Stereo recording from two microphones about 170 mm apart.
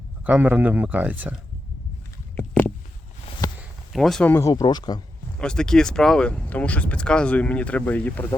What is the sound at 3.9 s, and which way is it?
Speech, centre (ahead or behind).